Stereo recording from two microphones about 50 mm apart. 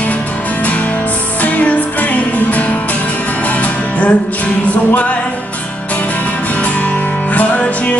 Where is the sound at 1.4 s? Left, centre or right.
Left.